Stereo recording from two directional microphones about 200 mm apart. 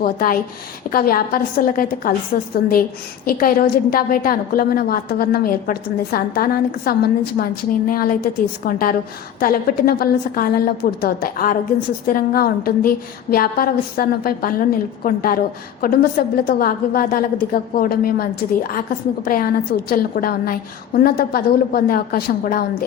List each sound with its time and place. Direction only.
0.0 s a woman's voice: 45° left (ahead or behind)
3.2 s a woman's voice: 45° left (ahead or behind)